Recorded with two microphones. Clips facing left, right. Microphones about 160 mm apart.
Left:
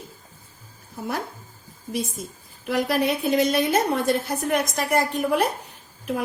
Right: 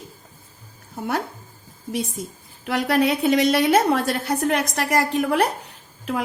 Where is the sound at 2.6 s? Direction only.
70° right (ahead or behind).